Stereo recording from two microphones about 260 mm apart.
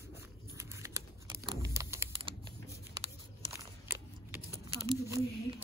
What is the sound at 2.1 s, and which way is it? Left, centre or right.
Typing, right.